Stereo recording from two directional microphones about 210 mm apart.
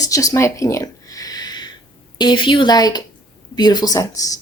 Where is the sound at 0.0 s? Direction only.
15° left (ahead or behind).